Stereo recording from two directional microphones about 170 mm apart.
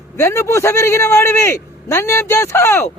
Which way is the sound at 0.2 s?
15° left (ahead or behind).